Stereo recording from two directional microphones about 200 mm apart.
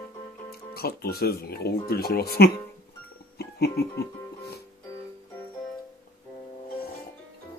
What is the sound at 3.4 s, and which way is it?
Music, 50° left (ahead or behind).